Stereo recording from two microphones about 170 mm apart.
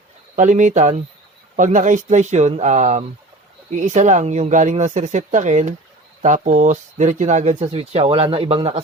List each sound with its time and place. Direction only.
0.3 s speech: 45° right (ahead or behind)